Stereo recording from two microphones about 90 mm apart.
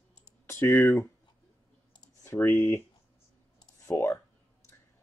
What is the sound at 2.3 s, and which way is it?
Speech, 35° left (ahead or behind).